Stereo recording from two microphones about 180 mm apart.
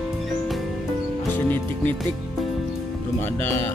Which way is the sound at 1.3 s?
10° left (ahead or behind).